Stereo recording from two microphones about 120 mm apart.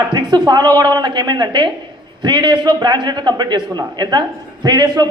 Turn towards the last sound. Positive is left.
turn(degrees=-35)  # may be behind; listen again after turning